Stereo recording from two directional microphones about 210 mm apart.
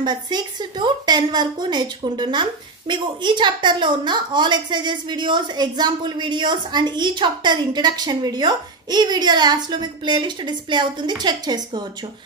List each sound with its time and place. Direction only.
0.0 s a woman's voice: 20° right (ahead or behind)